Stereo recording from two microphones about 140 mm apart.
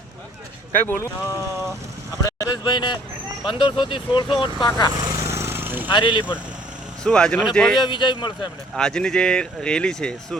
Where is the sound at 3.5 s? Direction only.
35° left (ahead or behind).